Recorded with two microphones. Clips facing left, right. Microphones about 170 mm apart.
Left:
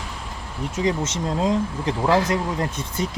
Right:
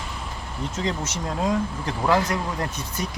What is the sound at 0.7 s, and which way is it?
Speech, 20° left (ahead or behind).